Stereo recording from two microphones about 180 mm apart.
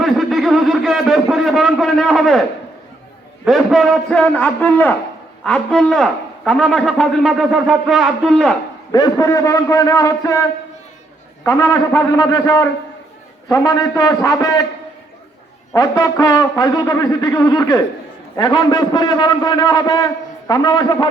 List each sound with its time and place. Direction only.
0.0 s a sound: centre (ahead or behind)
3.4 s a man's voice: centre (ahead or behind)
8.9 s a man's voice: 20° left (ahead or behind)
11.4 s a man's voice: 15° left (ahead or behind)
15.7 s a man's voice: 20° left (ahead or behind)